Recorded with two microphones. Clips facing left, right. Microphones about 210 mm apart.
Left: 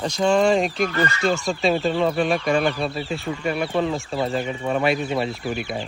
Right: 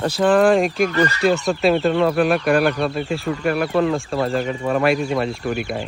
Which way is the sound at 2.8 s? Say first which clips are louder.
Right 4 dB; 55° right (ahead or behind).